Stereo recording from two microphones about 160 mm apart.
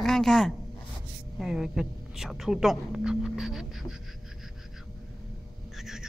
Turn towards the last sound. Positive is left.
turn(degrees=0)  # may be behind; listen again after turning